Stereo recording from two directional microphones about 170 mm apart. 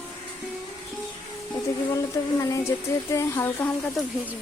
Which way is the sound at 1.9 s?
20° left (ahead or behind).